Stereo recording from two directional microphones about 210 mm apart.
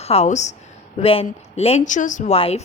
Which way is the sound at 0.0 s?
30° left (ahead or behind).